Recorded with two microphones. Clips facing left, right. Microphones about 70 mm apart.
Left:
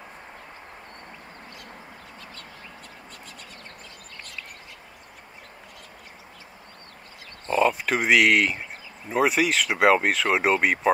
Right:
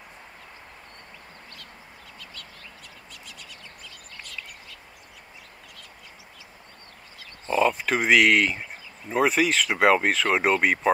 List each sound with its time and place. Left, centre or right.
3.1 s bird: left
7.4 s speech: centre